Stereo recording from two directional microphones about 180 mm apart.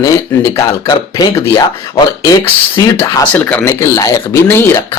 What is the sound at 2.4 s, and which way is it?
Speech, 15° left (ahead or behind).